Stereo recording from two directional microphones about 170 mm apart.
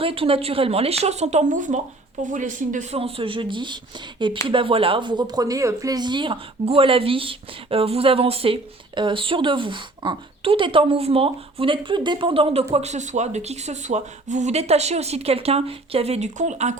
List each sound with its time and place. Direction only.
0.0 s speech: 35° right (ahead or behind)